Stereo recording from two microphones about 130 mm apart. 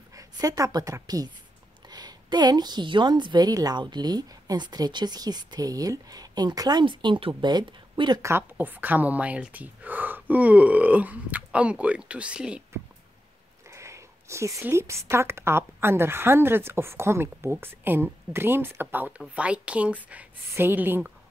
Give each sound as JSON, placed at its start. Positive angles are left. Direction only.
{"t": 0.1, "sound": "a woman's voice", "side_deg": -25}
{"t": 8.3, "sound": "speech", "side_deg": -15}
{"t": 13.7, "sound": "speech", "side_deg": -20}